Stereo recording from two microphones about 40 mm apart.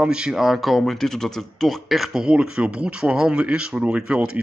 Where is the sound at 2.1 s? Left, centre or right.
Centre.